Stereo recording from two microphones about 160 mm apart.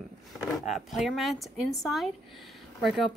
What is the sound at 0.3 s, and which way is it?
Speech, centre (ahead or behind).